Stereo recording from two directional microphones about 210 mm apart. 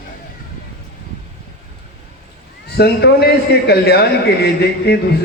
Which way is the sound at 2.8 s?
50° left (ahead or behind).